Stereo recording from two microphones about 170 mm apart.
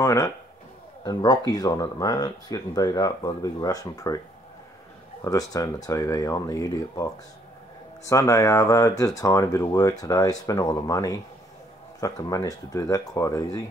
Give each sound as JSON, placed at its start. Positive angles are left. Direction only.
{"t": 0.0, "sound": "a sound", "side_deg": 20}
{"t": 1.0, "sound": "speech", "side_deg": 20}
{"t": 5.2, "sound": "speech", "side_deg": 20}